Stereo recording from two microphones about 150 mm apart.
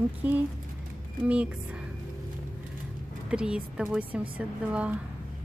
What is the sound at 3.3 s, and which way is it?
Speech, 5° right (ahead or behind).